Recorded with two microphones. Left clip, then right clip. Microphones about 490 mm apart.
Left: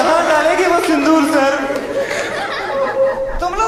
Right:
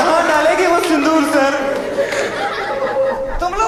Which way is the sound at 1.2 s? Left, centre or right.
Centre.